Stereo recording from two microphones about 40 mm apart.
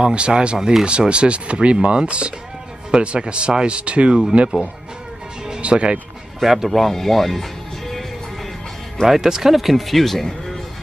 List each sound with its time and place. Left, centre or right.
0.0 s speech: right
5.6 s speech: right
6.4 s speech: centre
6.7 s speech: centre
9.0 s speech: centre